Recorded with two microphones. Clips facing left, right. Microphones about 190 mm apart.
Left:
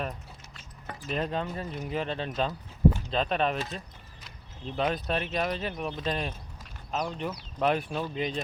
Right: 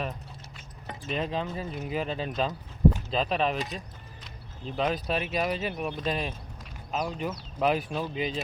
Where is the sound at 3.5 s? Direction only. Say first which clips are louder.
Right 1 dB; 15° right (ahead or behind).